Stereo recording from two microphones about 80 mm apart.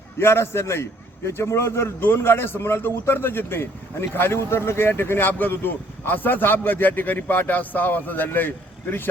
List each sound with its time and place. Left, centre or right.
0.2 s a man's voice: left